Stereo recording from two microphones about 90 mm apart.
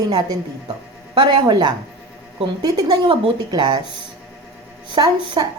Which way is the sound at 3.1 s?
75° right (ahead or behind).